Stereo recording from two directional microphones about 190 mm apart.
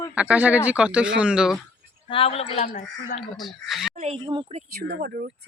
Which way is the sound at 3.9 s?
35° right (ahead or behind).